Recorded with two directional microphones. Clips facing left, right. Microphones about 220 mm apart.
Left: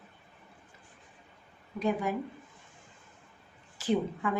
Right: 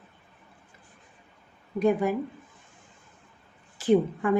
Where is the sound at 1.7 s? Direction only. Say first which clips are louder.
Right 7 dB; 55° right (ahead or behind).